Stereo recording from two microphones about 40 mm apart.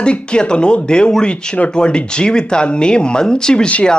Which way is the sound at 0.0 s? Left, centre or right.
Left.